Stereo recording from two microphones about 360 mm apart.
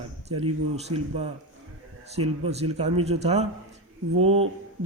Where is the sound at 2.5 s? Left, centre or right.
Centre.